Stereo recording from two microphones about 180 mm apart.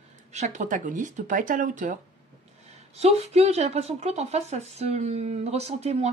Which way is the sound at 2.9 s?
35° right (ahead or behind).